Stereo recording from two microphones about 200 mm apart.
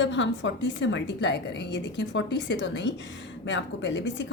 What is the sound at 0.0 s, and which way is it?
A woman's voice, 65° left (ahead or behind).